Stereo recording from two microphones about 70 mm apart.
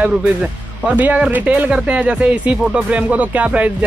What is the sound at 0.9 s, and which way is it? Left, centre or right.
Speech, right.